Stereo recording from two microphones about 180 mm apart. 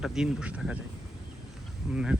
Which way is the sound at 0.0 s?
5° right (ahead or behind).